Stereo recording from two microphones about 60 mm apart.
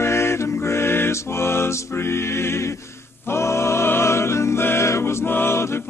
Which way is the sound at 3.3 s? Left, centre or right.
Left.